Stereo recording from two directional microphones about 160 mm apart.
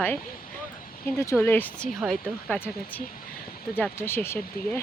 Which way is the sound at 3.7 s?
15° left (ahead or behind).